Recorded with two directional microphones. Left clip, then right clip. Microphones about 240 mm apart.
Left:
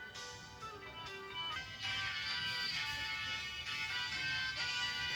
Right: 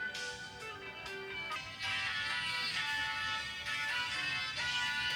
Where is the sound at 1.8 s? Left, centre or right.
Right.